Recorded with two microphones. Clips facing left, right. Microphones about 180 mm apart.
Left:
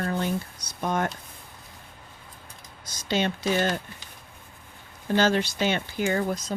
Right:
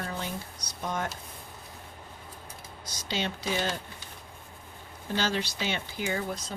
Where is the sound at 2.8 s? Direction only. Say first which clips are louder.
Left 7 dB; 50° left (ahead or behind).